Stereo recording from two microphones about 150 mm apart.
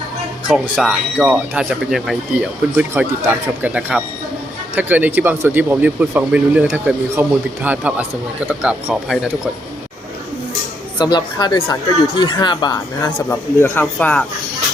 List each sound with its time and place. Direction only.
0.8 s speech: 5° right (ahead or behind)
10.9 s speech: 30° left (ahead or behind)
13.1 s speech: 15° left (ahead or behind)